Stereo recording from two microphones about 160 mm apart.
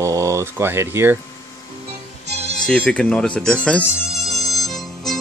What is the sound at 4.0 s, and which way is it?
Music, centre (ahead or behind).